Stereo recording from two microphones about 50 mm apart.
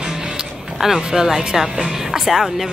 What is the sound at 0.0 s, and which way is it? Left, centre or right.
Speech, centre.